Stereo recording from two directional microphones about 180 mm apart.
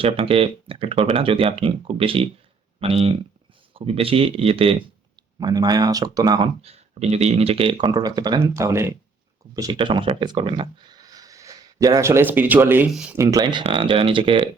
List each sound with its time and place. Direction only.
0.0 s speech: 30° right (ahead or behind)
5.4 s speech: 20° right (ahead or behind)
6.6 s speech: 35° right (ahead or behind); by 13.1 s 5° right (ahead or behind)
13.1 s speech: 20° right (ahead or behind)